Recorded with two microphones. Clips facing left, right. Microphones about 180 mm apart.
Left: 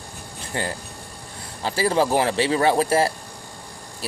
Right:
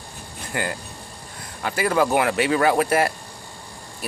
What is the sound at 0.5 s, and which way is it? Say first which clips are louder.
Speech: even; 30° left (ahead or behind).